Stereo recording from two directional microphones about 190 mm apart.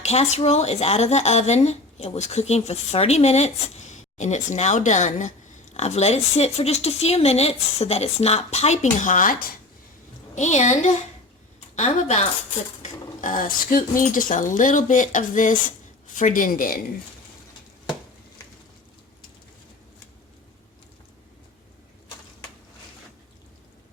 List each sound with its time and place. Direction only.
0.0 s speech: 35° left (ahead or behind)
12.8 s dishes: 45° left (ahead or behind)